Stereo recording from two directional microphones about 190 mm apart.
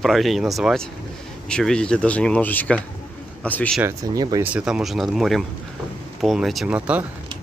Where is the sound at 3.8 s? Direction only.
15° right (ahead or behind).